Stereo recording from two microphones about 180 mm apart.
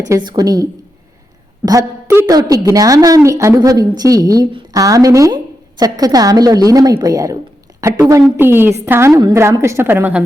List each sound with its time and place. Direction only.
0.1 s a woman's voice: 25° right (ahead or behind)